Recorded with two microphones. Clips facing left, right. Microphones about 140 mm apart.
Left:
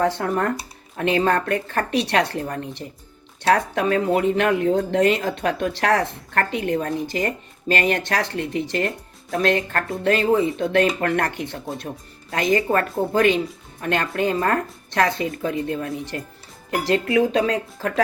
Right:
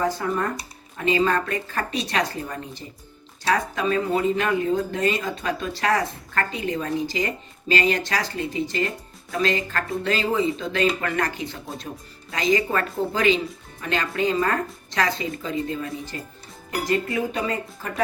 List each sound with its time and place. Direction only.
0.0 s speech: 65° left (ahead or behind)
16.8 s speech: 80° left